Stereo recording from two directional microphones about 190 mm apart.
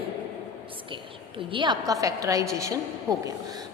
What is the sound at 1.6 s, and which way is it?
A woman's voice, 20° right (ahead or behind).